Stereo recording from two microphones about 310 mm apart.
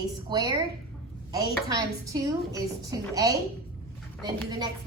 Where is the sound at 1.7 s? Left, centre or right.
Centre.